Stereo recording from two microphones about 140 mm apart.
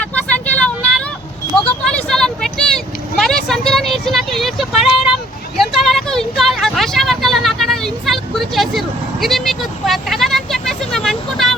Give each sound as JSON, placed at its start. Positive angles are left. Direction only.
{"t": 0.0, "sound": "vehicle", "side_deg": 10}
{"t": 1.8, "sound": "vehicle", "side_deg": 5}